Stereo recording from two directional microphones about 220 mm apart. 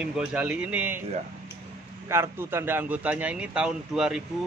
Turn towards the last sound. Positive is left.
turn(degrees=-5)  # may be behind; listen again after turning